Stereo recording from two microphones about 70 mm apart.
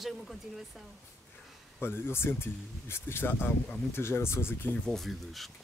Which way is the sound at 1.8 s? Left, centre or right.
Left.